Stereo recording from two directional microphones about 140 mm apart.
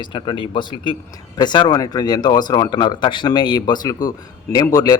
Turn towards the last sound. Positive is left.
turn(degrees=25)  # may be behind; listen again after turning